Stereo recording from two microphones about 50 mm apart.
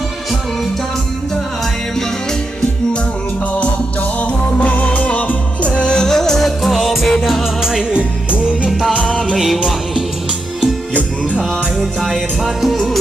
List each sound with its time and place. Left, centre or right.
4.2 s music: left; by 7.9 s centre
7.9 s music: right
8.9 s music: left
10.9 s music: left
11.8 s music: centre